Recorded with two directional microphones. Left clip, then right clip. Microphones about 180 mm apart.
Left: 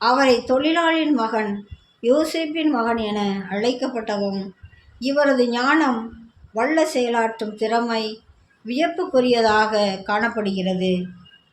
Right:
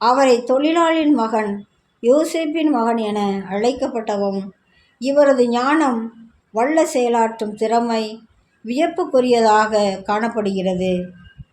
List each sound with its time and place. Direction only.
0.0 s a woman's voice: 55° right (ahead or behind)